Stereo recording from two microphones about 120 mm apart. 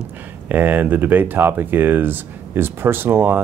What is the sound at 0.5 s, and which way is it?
Speech, 15° right (ahead or behind).